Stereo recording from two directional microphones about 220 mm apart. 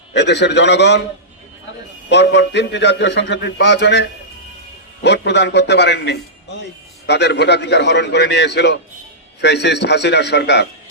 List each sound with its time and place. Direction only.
0.1 s a man's voice: 50° left (ahead or behind)
2.0 s a man's voice: 50° left (ahead or behind)